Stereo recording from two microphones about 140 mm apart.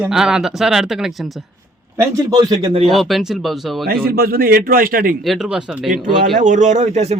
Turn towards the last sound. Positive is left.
turn(degrees=-55)  # may be behind; listen again after turning